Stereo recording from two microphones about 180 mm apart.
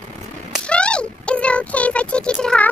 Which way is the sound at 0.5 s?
5° left (ahead or behind).